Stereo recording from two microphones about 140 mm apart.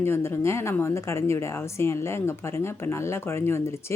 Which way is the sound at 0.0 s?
15° left (ahead or behind).